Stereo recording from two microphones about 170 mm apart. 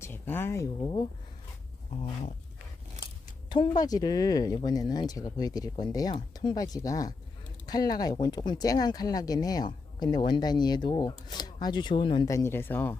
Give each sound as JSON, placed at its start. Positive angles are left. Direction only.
{"t": 0.0, "sound": "speech", "side_deg": 10}
{"t": 1.9, "sound": "speech", "side_deg": 35}
{"t": 3.5, "sound": "speech", "side_deg": 25}